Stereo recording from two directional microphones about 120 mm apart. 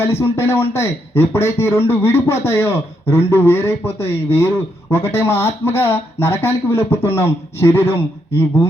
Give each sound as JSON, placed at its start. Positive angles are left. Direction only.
{"t": 0.0, "sound": "speech", "side_deg": 20}